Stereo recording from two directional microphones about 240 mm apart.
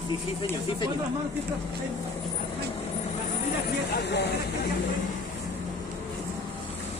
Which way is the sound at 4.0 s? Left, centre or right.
Left.